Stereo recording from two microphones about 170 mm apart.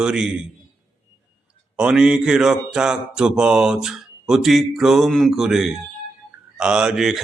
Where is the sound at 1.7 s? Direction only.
5° right (ahead or behind).